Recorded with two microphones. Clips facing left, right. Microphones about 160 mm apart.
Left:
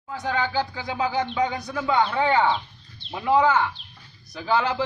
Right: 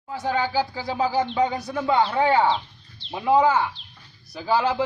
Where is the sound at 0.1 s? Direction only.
10° right (ahead or behind).